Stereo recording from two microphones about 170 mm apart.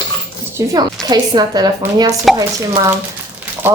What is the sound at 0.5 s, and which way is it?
A woman's voice, 20° right (ahead or behind).